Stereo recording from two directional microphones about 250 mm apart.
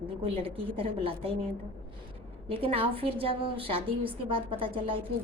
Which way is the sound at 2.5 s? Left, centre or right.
Right.